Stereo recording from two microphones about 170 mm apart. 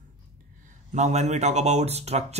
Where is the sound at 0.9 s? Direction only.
40° right (ahead or behind).